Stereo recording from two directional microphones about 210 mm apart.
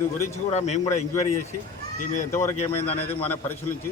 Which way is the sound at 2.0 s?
35° left (ahead or behind).